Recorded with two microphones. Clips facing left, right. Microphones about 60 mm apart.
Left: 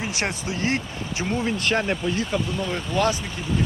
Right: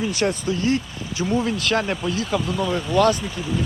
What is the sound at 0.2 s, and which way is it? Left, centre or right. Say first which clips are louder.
Speech: right 7 dB; left.